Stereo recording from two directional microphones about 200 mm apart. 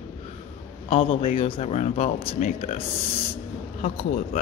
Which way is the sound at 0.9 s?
25° left (ahead or behind).